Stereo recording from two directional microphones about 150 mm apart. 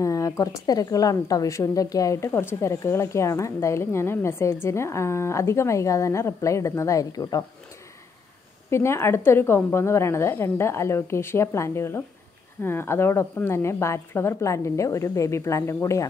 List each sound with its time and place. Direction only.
0.0 s a woman's voice: 20° left (ahead or behind)
8.6 s a woman's voice: 15° left (ahead or behind)